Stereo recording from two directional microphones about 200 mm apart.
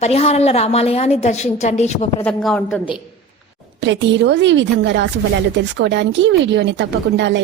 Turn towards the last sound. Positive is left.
turn(degrees=-60)  # may be behind; listen again after turning